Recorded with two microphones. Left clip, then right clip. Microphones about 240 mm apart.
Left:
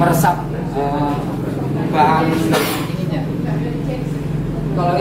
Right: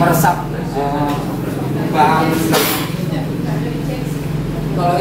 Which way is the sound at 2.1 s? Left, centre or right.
Centre.